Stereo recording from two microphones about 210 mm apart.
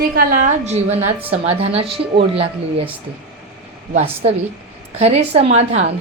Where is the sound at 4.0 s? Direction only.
30° right (ahead or behind).